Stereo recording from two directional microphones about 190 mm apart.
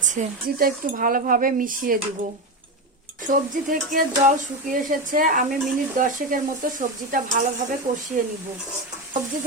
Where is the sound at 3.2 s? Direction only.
40° right (ahead or behind).